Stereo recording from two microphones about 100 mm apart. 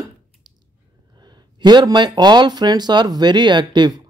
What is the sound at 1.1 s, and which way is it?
Speech, 45° right (ahead or behind).